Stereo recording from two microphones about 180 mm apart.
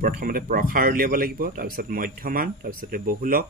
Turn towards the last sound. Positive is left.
turn(degrees=-50)  # may be behind; listen again after turning